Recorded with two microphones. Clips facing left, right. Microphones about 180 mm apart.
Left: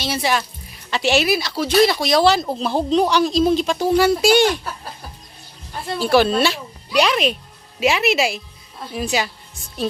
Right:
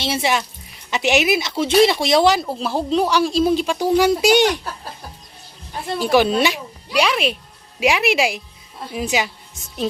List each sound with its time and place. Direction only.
0.0 s speech: 25° right (ahead or behind)
2.6 s speech: 5° right (ahead or behind)
6.0 s speech: 15° right (ahead or behind)
7.0 s speech: 5° right (ahead or behind)